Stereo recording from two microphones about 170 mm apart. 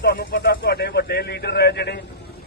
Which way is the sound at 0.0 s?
65° left (ahead or behind).